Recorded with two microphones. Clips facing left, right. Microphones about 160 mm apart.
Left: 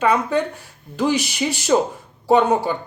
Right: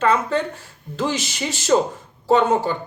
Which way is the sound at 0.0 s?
15° left (ahead or behind).